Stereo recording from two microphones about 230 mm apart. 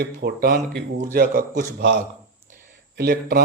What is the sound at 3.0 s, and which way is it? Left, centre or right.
Speech, right.